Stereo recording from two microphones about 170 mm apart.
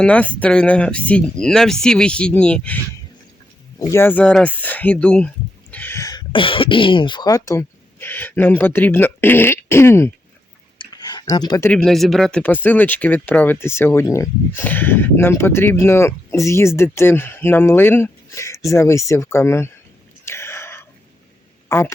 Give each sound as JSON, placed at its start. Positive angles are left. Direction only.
{"t": 0.0, "sound": "speech", "side_deg": 10}
{"t": 3.8, "sound": "speech", "side_deg": 20}
{"t": 10.8, "sound": "a sound", "side_deg": 25}
{"t": 11.7, "sound": "speech", "side_deg": 5}
{"t": 20.2, "sound": "whispering", "side_deg": 15}
{"t": 21.7, "sound": "speech", "side_deg": 15}